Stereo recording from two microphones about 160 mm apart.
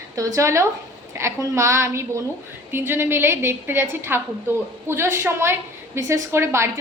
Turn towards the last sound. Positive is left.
turn(degrees=-15)  # may be behind; listen again after turning